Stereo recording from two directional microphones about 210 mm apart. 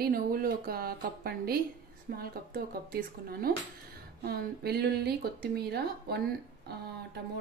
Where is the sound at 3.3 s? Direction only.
45° right (ahead or behind).